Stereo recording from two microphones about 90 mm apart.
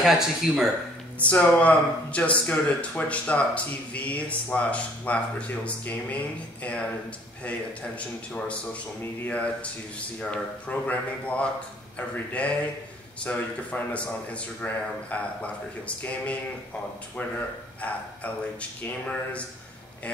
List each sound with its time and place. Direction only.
0.0 s speech: 5° right (ahead or behind)
1.2 s speech: 15° left (ahead or behind)
8.3 s speech: 15° left (ahead or behind)
13.2 s speech: 15° left (ahead or behind)
17.8 s speech: 15° left (ahead or behind)